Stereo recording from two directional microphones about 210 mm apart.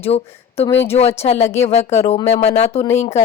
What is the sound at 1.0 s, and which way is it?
Speech, 30° left (ahead or behind).